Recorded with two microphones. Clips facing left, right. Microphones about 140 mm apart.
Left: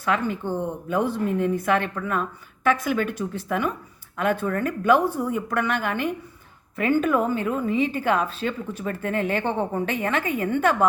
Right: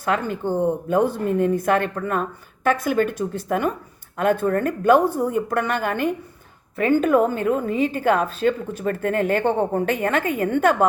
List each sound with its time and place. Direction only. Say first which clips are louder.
0.0 s a woman's voice: right 2 dB; 45° right (ahead or behind)